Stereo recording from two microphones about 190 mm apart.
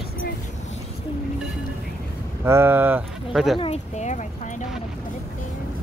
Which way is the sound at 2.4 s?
10° right (ahead or behind).